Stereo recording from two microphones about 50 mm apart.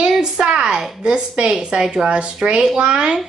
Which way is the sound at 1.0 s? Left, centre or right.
Centre.